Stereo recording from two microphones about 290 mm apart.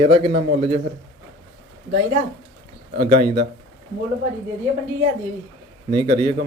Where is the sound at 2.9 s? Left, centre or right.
Centre.